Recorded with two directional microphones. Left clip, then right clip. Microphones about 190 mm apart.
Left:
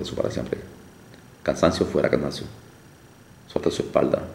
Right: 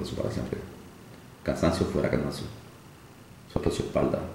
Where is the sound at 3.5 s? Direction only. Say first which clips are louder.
Left 6 dB; 5° left (ahead or behind).